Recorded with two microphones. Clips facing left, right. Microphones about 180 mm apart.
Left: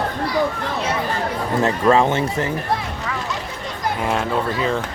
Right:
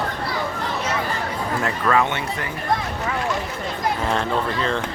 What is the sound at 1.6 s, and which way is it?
Speech, 25° left (ahead or behind).